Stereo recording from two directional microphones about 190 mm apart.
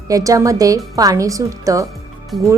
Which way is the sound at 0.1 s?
15° right (ahead or behind).